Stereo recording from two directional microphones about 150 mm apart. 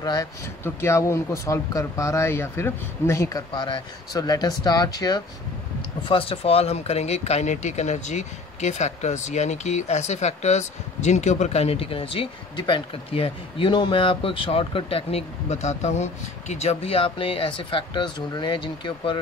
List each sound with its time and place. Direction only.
0.0 s a man's voice: 25° left (ahead or behind)
5.8 s speech: 35° left (ahead or behind)